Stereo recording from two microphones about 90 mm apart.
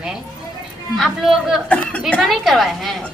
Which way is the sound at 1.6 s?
10° left (ahead or behind).